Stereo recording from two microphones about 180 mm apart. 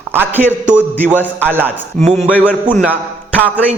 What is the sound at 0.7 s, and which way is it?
A man's voice, 10° left (ahead or behind).